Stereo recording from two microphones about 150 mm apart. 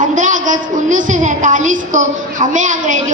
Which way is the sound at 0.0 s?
60° right (ahead or behind).